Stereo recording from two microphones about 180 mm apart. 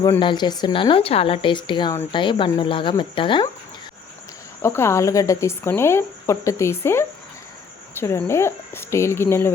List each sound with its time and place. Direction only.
0.0 s a woman's voice: 25° left (ahead or behind)
4.6 s speech: 15° left (ahead or behind)